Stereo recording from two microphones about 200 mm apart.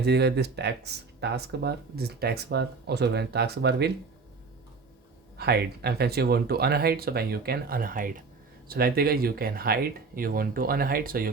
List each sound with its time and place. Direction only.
0.0 s speech: 55° right (ahead or behind)
5.4 s speech: 55° right (ahead or behind)